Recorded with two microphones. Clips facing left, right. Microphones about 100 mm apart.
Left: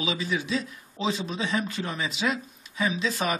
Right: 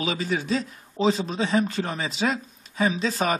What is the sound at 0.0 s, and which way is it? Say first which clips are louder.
A man's voice: right 2 dB; 45° right (ahead or behind).